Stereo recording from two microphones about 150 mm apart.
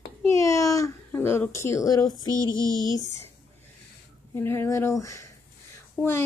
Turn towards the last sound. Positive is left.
turn(degrees=0)  # may be behind; listen again after turning